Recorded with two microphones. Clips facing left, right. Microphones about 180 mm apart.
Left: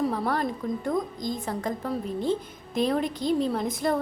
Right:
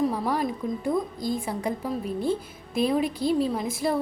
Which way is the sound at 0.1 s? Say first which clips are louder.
Even; 10° right (ahead or behind).